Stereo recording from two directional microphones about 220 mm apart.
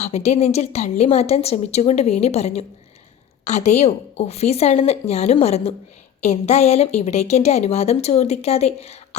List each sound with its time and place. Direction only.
0.0 s a woman's voice: 30° left (ahead or behind)